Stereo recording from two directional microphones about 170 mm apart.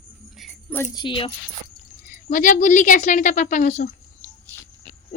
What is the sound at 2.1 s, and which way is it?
Speech, 50° left (ahead or behind).